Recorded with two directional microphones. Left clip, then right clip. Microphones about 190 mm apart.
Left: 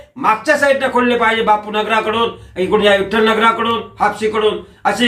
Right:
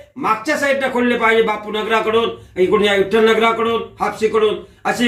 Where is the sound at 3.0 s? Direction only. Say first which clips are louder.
Even; 25° left (ahead or behind).